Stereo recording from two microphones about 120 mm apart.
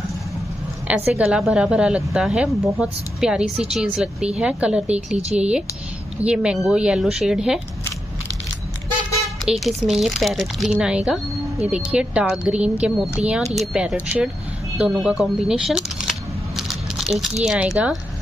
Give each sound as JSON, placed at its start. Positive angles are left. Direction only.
{"t": 0.8, "sound": "a woman's voice", "side_deg": -10}
{"t": 9.4, "sound": "a woman's voice", "side_deg": 0}
{"t": 15.0, "sound": "a sound", "side_deg": -5}